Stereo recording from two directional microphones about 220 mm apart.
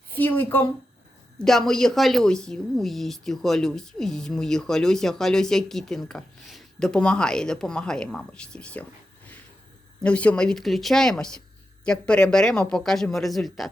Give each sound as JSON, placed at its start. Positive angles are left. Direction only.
{"t": 0.1, "sound": "a woman's voice", "side_deg": 10}
{"t": 10.0, "sound": "a woman's voice", "side_deg": 5}